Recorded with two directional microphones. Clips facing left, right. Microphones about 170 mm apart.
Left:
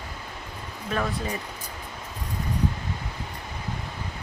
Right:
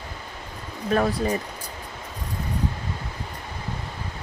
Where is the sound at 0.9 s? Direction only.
40° right (ahead or behind).